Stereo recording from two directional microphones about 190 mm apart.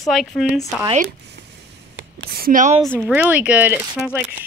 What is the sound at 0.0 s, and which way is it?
Speech, centre (ahead or behind).